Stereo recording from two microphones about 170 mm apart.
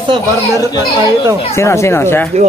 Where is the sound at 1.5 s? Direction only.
15° left (ahead or behind).